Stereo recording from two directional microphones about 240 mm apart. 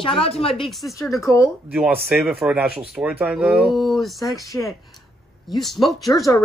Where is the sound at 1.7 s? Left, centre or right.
Centre.